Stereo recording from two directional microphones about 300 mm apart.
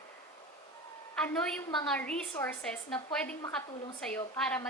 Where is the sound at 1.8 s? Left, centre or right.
Centre.